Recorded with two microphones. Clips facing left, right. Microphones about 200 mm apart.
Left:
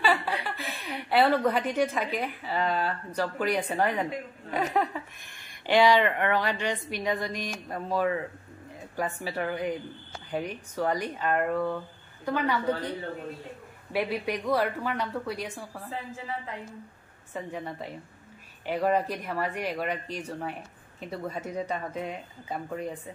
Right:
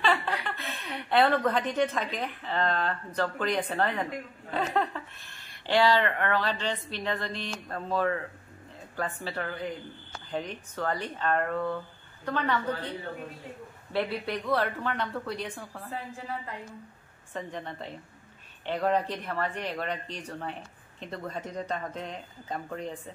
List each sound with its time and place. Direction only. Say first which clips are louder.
0.0 s a woman's voice: left 1 dB; 10° left (ahead or behind)
13.9 s speech: left 1 dB; 15° left (ahead or behind)
17.3 s speech: left 2 dB; 10° left (ahead or behind)